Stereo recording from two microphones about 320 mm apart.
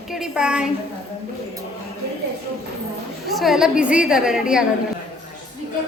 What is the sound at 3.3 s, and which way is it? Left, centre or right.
A woman's voice, centre.